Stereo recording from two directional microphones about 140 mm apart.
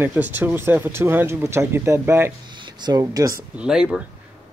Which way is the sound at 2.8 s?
30° right (ahead or behind).